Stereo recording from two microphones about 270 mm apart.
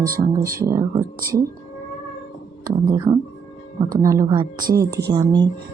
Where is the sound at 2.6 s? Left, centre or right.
Centre.